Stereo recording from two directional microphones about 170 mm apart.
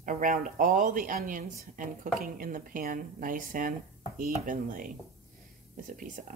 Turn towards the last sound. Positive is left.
turn(degrees=-50)  # may be behind; listen again after turning